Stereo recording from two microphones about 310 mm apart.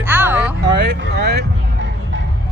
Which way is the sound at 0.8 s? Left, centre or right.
Right.